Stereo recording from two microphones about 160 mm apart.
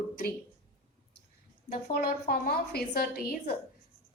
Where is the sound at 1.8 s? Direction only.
75° left (ahead or behind).